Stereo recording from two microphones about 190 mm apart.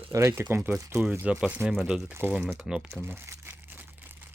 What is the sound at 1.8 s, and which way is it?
Crumpling, 5° right (ahead or behind).